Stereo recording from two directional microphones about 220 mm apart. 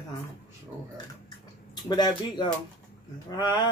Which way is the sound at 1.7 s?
20° left (ahead or behind).